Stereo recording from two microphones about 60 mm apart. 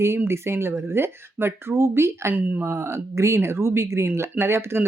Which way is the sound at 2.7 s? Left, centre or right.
Right.